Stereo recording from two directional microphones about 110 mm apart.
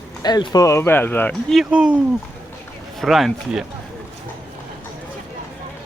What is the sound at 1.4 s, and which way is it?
Speech, centre (ahead or behind).